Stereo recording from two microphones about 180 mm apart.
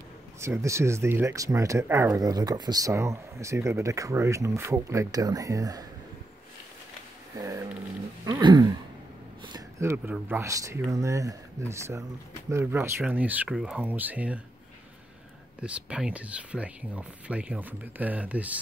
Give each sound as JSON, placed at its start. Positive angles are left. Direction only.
{"t": 0.4, "sound": "speech", "side_deg": -15}
{"t": 7.3, "sound": "speech", "side_deg": -15}
{"t": 9.8, "sound": "speech", "side_deg": -10}
{"t": 15.6, "sound": "speech", "side_deg": -5}